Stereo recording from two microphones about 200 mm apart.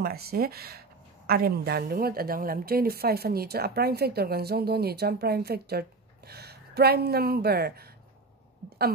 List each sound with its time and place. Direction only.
0.0 s speech: 50° right (ahead or behind)